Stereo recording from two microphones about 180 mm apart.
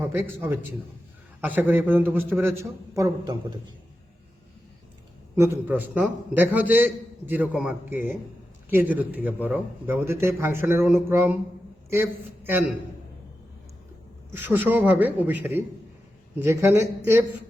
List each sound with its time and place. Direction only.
0.0 s a man's voice: 10° right (ahead or behind)
5.4 s a man's voice: 10° right (ahead or behind)
12.5 s a man's voice: 10° right (ahead or behind)
14.3 s a man's voice: 10° right (ahead or behind)